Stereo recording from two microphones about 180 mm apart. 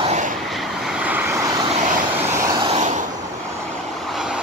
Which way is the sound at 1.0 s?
10° right (ahead or behind).